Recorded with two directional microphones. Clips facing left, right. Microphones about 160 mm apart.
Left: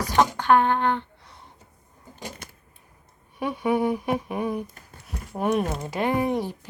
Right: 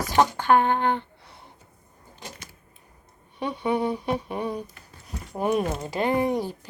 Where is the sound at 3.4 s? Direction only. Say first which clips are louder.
Left 2 dB; 10° left (ahead or behind).